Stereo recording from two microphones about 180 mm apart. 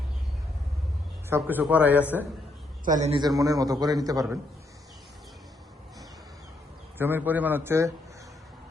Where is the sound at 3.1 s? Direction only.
20° right (ahead or behind).